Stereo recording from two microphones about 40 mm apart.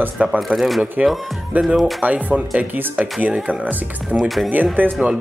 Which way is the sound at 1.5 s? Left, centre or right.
Right.